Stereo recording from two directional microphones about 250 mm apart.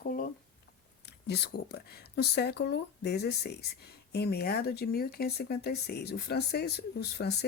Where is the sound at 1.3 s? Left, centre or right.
Left.